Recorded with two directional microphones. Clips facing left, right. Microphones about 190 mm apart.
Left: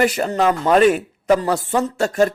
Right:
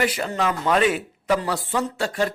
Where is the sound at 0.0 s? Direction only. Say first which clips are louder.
Left 6 dB; 45° left (ahead or behind).